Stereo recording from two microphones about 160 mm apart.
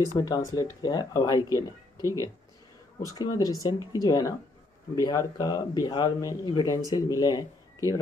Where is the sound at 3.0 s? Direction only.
25° left (ahead or behind).